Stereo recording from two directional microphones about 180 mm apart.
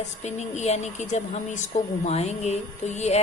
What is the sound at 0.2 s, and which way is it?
A woman's voice, 40° left (ahead or behind).